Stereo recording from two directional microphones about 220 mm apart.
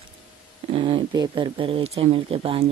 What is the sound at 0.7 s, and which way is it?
Speech, 25° right (ahead or behind).